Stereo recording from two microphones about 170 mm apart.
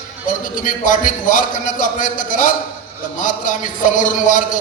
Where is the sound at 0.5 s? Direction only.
50° left (ahead or behind).